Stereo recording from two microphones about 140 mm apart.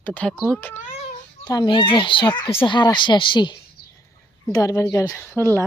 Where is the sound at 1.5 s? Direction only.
30° left (ahead or behind).